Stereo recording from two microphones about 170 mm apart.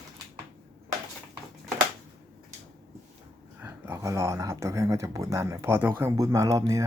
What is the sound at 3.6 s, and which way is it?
Speech, 15° right (ahead or behind).